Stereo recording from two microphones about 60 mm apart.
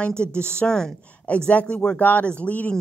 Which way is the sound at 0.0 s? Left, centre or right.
Centre.